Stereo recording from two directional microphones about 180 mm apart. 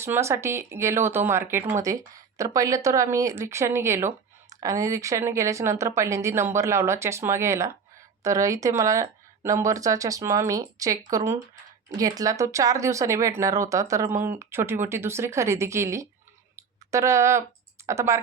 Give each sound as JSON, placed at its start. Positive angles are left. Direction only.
{"t": 0.0, "sound": "speech", "side_deg": -15}
{"t": 16.6, "sound": "a sound", "side_deg": -15}
{"t": 17.8, "sound": "speech", "side_deg": -15}